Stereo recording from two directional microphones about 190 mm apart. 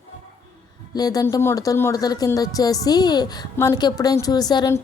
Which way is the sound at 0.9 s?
20° left (ahead or behind).